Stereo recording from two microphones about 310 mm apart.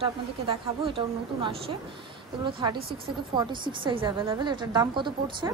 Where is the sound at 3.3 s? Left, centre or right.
Centre.